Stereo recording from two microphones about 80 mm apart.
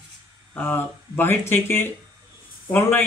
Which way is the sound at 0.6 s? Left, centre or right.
Left.